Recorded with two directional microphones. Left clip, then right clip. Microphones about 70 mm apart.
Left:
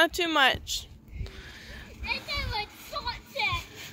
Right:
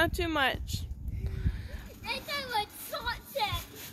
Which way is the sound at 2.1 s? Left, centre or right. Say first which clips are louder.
Right 1 dB; right.